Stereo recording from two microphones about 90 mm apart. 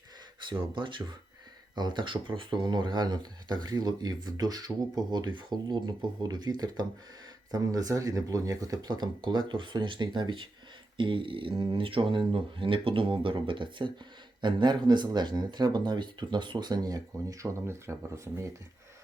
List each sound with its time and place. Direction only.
0.4 s speech: 65° right (ahead or behind)
1.7 s speech: 55° right (ahead or behind); by 18.5 s 35° right (ahead or behind)